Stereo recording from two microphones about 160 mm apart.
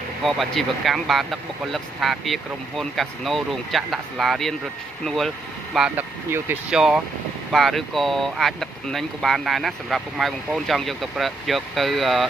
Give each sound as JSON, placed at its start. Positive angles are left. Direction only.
{"t": 0.2, "sound": "speech", "side_deg": 0}